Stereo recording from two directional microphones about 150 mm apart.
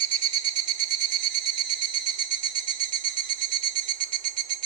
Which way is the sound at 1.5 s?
35° left (ahead or behind).